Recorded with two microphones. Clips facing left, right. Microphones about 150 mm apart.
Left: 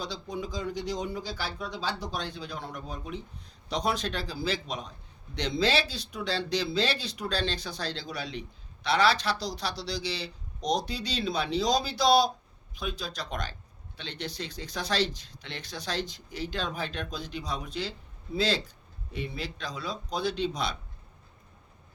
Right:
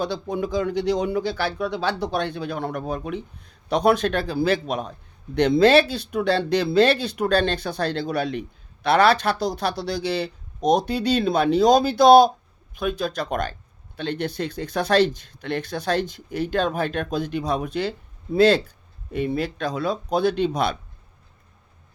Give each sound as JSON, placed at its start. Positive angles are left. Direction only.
{"t": 0.0, "sound": "a man's voice", "side_deg": -60}